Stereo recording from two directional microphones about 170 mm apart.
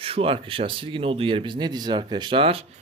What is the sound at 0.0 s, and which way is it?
Speech, 35° right (ahead or behind).